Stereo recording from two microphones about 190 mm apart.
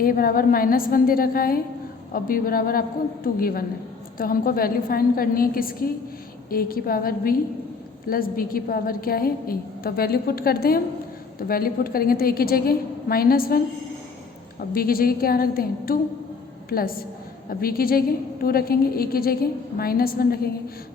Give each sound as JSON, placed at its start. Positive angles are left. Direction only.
{"t": 0.0, "sound": "a woman's voice", "side_deg": 50}
{"t": 14.6, "sound": "a woman's voice", "side_deg": 50}